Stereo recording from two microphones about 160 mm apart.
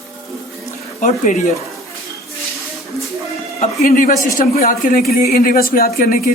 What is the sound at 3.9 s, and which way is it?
Speech, 60° left (ahead or behind).